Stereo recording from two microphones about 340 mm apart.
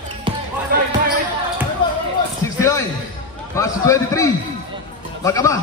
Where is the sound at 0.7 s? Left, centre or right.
Right.